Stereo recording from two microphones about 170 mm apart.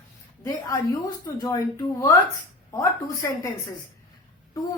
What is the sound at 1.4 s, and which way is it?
Speech, 20° left (ahead or behind).